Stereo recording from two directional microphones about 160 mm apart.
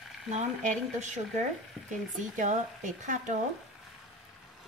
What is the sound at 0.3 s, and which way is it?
Speech, 45° right (ahead or behind).